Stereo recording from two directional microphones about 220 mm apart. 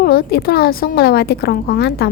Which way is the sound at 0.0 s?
45° left (ahead or behind).